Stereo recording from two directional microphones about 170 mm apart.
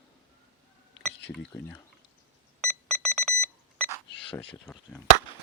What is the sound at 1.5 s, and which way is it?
Speech, 15° left (ahead or behind).